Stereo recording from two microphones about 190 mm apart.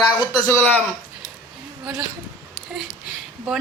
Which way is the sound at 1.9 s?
5° right (ahead or behind).